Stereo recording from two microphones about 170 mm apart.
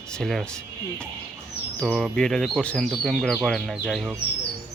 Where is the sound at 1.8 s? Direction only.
Centre (ahead or behind).